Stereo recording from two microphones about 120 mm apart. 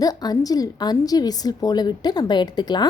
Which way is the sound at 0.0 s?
30° left (ahead or behind).